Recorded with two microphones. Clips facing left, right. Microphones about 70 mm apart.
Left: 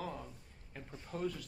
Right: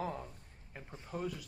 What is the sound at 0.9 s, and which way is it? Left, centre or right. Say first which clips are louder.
Speech: left 1 dB; centre.